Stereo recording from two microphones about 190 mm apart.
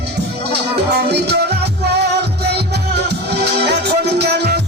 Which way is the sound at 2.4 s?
60° right (ahead or behind).